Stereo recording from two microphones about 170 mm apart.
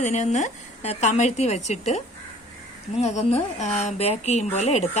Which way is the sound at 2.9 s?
40° left (ahead or behind).